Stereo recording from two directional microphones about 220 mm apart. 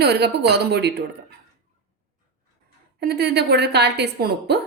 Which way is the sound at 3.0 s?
45° right (ahead or behind).